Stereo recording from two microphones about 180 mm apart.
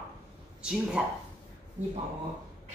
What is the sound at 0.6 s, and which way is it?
Speech, 5° right (ahead or behind).